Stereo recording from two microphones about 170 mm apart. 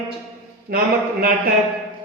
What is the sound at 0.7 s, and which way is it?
Speech, 60° right (ahead or behind).